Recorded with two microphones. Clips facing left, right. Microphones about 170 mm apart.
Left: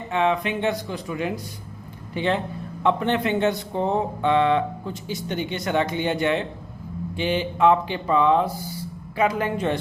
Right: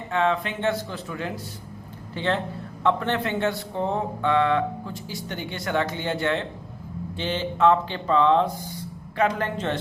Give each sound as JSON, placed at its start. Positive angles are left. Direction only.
{"t": 0.1, "sound": "speech", "side_deg": 15}